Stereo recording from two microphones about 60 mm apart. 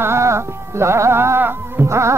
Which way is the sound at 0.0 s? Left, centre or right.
Right.